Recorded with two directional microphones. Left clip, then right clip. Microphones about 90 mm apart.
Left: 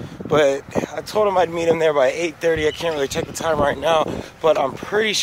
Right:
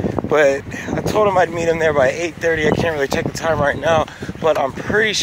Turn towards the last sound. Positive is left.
turn(degrees=25)  # may be behind; listen again after turning